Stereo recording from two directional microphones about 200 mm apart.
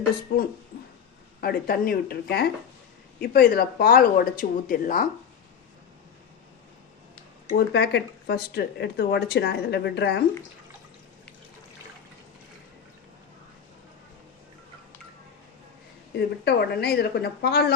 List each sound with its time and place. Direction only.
0.3 s speech: 45° left (ahead or behind)
7.5 s speech: 60° left (ahead or behind)
16.1 s speech: 55° left (ahead or behind)